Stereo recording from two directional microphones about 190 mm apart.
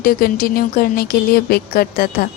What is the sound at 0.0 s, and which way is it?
A woman's voice, 50° left (ahead or behind).